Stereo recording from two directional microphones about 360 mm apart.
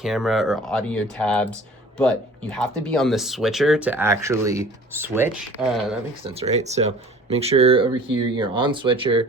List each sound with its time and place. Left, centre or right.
0.0 s speech: centre
6.4 s speech: centre